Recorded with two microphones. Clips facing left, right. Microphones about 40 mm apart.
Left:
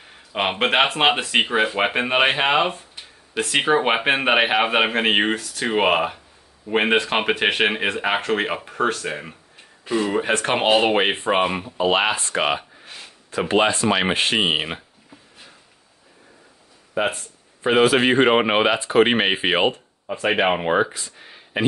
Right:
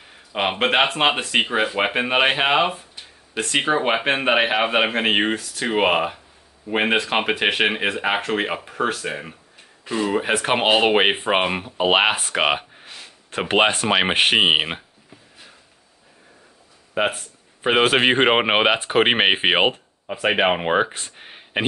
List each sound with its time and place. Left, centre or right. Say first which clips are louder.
0.0 s speech: even; centre; by 12.5 s right
13.4 s speech: even; right
13.8 s speech: right 2 dB; right
17.1 s a sound: even; right
17.8 s speech: even; right
19.7 s speech: left 1 dB; centre
20.9 s a sound: right 1 dB; right